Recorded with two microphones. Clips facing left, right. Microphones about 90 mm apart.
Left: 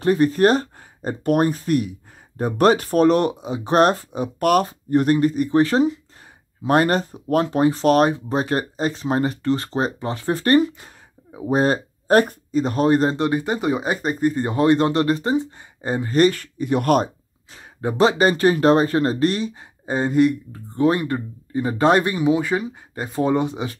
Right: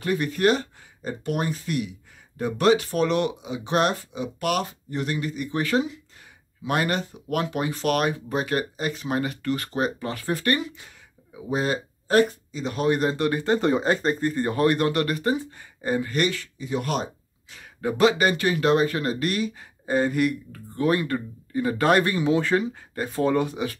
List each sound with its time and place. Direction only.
0.0 s speech: 35° left (ahead or behind); by 17.1 s 55° left (ahead or behind)
17.5 s speech: 30° left (ahead or behind)